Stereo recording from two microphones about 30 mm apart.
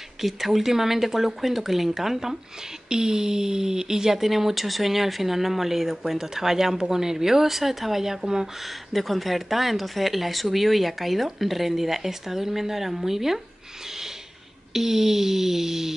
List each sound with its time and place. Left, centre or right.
0.2 s speech: centre
2.9 s speech: right
8.9 s speech: centre
14.7 s speech: centre